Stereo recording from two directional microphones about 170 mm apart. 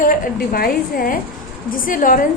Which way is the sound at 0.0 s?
60° left (ahead or behind).